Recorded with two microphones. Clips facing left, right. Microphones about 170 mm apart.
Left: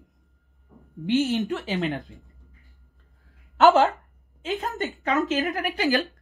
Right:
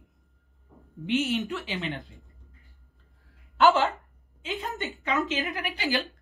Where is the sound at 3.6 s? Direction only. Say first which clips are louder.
Left 4 dB; 45° left (ahead or behind).